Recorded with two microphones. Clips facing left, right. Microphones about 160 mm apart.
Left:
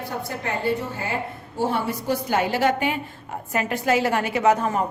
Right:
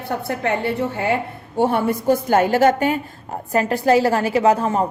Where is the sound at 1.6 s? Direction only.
55° right (ahead or behind); by 4.8 s 30° right (ahead or behind).